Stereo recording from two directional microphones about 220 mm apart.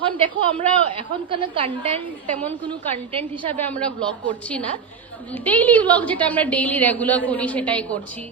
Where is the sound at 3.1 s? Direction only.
20° right (ahead or behind).